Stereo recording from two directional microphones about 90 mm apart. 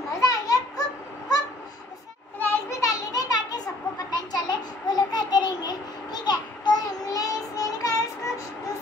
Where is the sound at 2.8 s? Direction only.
45° left (ahead or behind).